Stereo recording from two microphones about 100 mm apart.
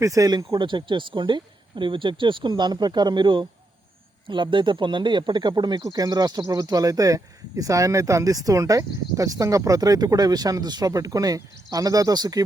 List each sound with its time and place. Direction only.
0.0 s speech: 35° right (ahead or behind)